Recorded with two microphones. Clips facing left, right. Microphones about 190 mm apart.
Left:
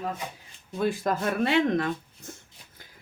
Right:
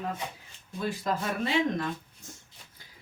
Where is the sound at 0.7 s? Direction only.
55° left (ahead or behind).